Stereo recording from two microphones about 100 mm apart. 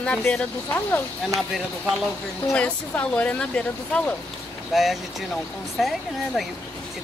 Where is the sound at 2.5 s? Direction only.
10° left (ahead or behind).